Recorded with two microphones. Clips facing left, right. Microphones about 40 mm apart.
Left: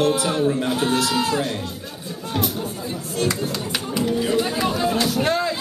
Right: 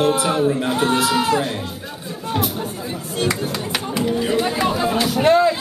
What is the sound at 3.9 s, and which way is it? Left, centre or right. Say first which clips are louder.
Speech: right 1 dB; centre.